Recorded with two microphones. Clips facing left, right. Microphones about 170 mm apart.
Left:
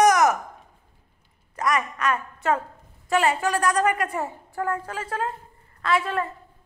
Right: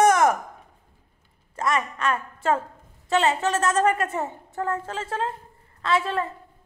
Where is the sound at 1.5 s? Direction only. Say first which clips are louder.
Even; 25° right (ahead or behind).